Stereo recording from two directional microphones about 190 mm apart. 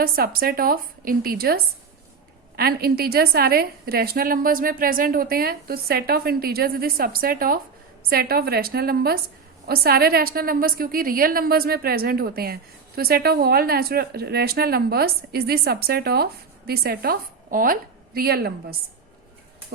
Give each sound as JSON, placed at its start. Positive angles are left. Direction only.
{"t": 0.0, "sound": "a woman's voice", "side_deg": -50}